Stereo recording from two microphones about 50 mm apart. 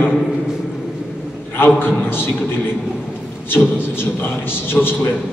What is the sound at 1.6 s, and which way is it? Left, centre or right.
A man's voice, left.